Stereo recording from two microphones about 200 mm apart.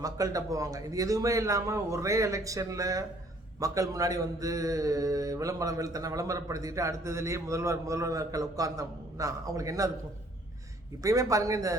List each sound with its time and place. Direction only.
0.0 s a man's voice: 15° right (ahead or behind)
11.0 s a man's voice: 15° right (ahead or behind)